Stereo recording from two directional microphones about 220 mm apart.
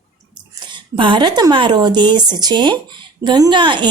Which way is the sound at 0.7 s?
20° right (ahead or behind).